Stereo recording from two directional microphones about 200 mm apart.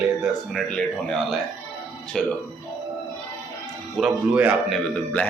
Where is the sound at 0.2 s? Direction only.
5° left (ahead or behind).